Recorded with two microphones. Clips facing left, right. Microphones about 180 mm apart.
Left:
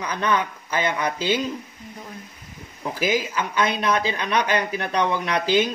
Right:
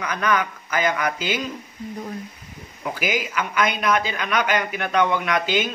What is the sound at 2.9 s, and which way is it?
Speech, 30° left (ahead or behind).